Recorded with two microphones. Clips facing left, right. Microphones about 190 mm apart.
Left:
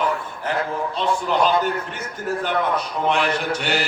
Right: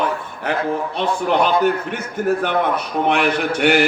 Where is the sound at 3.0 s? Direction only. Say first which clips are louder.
Right 3 dB; 60° right (ahead or behind).